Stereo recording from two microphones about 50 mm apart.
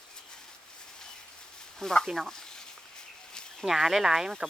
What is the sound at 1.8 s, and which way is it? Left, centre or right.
Speech, centre.